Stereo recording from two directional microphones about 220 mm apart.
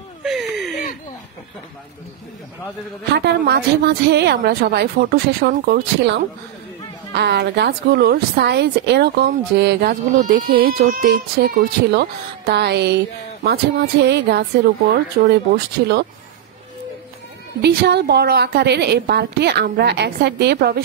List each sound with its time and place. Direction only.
0.2 s a sound: centre (ahead or behind)
3.1 s a woman's voice: 45° right (ahead or behind)
17.6 s a woman's voice: 50° right (ahead or behind)